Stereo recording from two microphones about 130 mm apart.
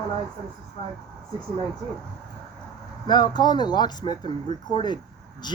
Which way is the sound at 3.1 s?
35° left (ahead or behind).